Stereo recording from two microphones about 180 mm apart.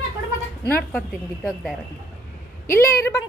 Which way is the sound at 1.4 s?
Centre (ahead or behind).